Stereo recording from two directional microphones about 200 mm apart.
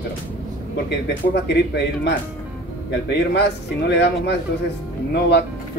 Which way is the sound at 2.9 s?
55° left (ahead or behind).